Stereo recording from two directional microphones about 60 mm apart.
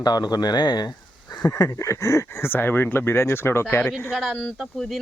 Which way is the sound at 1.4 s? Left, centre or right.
Left.